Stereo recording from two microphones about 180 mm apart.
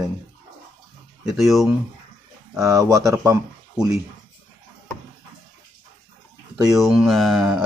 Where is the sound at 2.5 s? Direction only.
20° right (ahead or behind).